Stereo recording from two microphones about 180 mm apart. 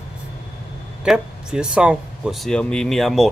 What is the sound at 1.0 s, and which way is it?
Speech, 5° right (ahead or behind).